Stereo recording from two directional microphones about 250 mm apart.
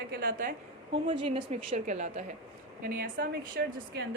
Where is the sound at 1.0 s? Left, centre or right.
Right.